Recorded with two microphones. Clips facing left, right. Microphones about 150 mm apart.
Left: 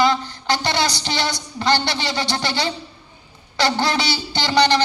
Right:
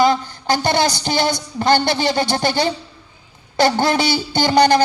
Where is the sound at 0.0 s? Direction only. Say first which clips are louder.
Right 3 dB; 45° right (ahead or behind).